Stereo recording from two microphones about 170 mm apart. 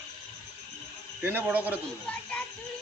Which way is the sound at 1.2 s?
10° right (ahead or behind).